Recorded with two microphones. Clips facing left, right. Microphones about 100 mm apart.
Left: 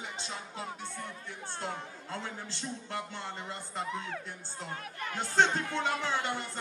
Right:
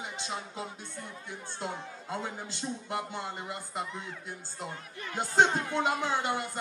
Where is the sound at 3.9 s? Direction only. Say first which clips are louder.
Left 4 dB; 65° left (ahead or behind).